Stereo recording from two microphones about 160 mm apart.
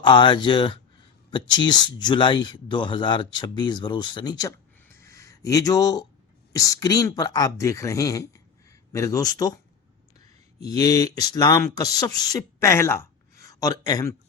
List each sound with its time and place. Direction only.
0.0 s speech: 30° left (ahead or behind)